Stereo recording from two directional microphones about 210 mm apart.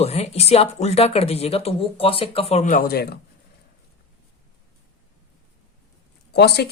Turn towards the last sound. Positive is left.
turn(degrees=50)  # may be behind; listen again after turning